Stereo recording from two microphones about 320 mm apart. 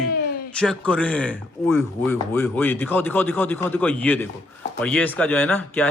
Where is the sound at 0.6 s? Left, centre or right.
Centre.